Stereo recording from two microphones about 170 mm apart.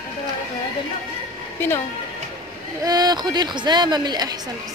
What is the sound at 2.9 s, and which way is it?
A woman's voice, 25° right (ahead or behind).